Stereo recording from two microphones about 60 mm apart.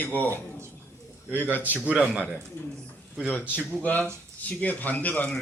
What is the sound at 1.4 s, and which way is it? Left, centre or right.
Speech, right.